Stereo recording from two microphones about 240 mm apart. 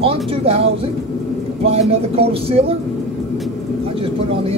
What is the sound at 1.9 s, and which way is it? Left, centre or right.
Speech, right.